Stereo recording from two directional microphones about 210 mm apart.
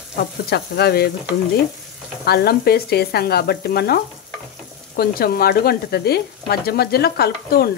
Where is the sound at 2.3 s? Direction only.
50° left (ahead or behind).